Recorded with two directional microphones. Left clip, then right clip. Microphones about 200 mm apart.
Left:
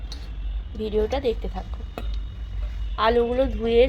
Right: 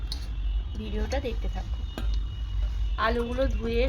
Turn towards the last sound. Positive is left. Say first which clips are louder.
# left 8 dB
turn(degrees=20)  # may be behind; listen again after turning